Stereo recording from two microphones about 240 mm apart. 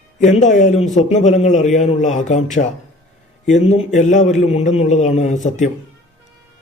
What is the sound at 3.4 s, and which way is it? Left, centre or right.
A man's voice, left.